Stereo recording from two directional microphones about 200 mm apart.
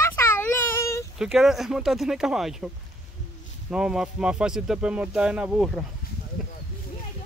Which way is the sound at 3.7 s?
5° right (ahead or behind).